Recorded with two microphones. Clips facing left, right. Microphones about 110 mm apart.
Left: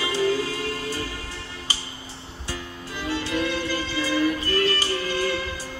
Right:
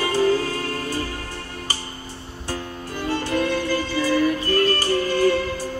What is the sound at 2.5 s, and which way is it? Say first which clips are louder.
Music: right 5 dB; 50° right (ahead or behind).